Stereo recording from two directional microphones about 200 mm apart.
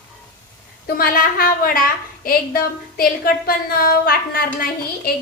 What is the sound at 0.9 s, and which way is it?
Speech, 45° left (ahead or behind).